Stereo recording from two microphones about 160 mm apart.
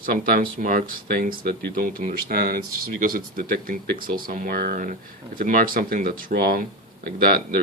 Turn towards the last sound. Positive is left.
turn(degrees=-70)  # may be behind; listen again after turning